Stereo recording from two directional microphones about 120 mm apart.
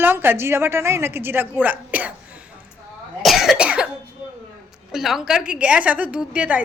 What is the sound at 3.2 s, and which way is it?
Cough, centre (ahead or behind).